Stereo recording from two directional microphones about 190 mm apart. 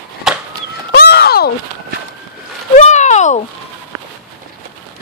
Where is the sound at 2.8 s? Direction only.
40° left (ahead or behind).